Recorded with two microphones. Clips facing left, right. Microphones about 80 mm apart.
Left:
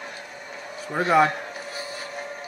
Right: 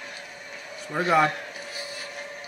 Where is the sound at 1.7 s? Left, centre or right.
Left.